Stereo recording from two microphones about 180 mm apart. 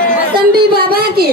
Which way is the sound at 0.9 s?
60° right (ahead or behind).